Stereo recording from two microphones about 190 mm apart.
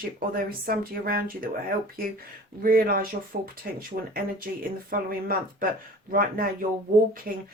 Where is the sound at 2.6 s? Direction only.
50° right (ahead or behind).